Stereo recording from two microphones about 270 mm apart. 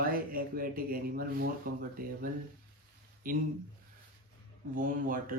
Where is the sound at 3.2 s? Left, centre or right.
Right.